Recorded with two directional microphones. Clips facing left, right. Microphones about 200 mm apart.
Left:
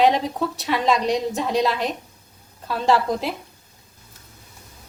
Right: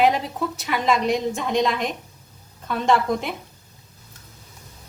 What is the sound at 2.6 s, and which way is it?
Speech, 30° left (ahead or behind).